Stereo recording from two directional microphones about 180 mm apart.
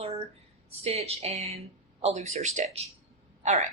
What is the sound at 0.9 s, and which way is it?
Speech, 35° right (ahead or behind).